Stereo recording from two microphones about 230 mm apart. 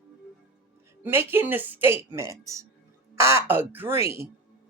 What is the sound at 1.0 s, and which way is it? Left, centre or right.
A woman's voice, centre.